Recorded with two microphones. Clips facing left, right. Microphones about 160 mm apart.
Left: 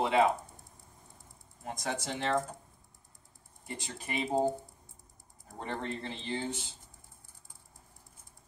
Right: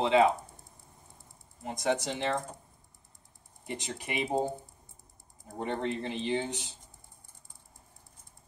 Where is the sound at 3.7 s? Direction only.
20° right (ahead or behind).